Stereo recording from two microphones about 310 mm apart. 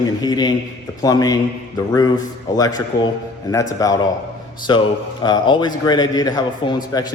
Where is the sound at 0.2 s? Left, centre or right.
Centre.